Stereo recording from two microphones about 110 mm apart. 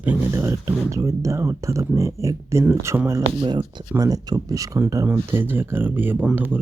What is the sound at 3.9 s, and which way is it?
Speech, 35° right (ahead or behind).